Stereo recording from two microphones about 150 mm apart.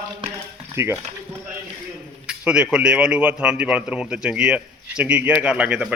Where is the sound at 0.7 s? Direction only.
15° right (ahead or behind).